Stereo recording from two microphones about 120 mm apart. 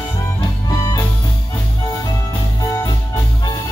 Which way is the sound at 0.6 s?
30° left (ahead or behind).